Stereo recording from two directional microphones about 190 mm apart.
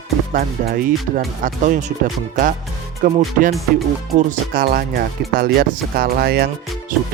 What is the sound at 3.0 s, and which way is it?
Speech, 45° right (ahead or behind).